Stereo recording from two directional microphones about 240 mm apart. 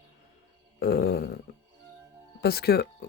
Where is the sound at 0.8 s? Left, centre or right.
Left.